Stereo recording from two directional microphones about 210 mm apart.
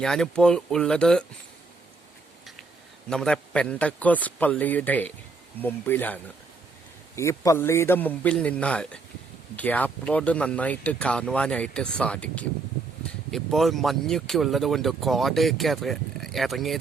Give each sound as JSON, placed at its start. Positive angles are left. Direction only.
{"t": 0.0, "sound": "speech", "side_deg": 0}
{"t": 3.1, "sound": "a man's voice", "side_deg": 5}
{"t": 7.2, "sound": "a man's voice", "side_deg": 15}